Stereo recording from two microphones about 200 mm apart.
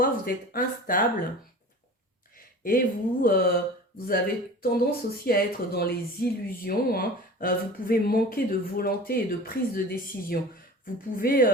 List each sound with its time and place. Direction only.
0.0 s speech: 45° left (ahead or behind)
2.3 s speech: 45° left (ahead or behind)